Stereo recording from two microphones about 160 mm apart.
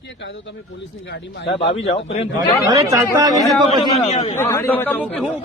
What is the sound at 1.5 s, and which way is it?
Speech, 35° left (ahead or behind).